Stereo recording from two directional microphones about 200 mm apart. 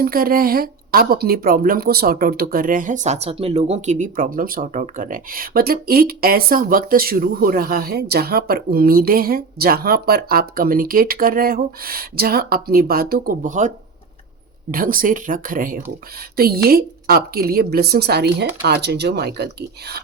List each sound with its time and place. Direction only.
0.0 s speech: 45° right (ahead or behind)